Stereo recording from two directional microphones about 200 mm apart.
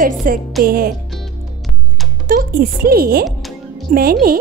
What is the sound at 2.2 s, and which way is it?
Speech, 45° right (ahead or behind).